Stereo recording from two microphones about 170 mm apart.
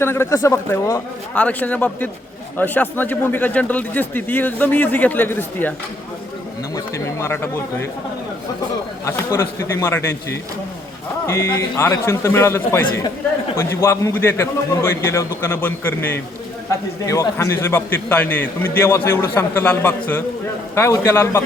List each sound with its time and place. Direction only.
0.0 s a man's voice: 15° left (ahead or behind)
6.7 s a man's voice: 15° left (ahead or behind)
9.0 s a man's voice: 15° left (ahead or behind)